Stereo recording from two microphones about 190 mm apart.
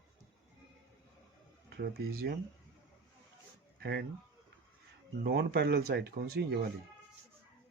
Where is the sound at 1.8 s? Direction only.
55° right (ahead or behind).